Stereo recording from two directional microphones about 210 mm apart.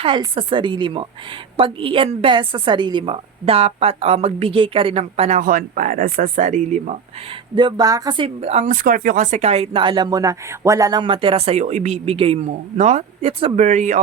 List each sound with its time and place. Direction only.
0.0 s speech: 25° right (ahead or behind)
7.5 s speech: 20° right (ahead or behind); by 14.0 s 35° right (ahead or behind)